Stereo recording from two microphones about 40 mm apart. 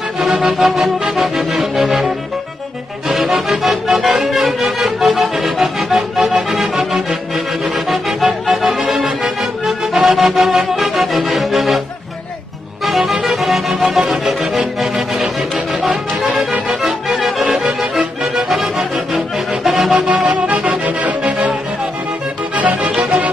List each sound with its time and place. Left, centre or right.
0.2 s music: centre
12.8 s music: centre
19.9 s music: right
22.8 s music: right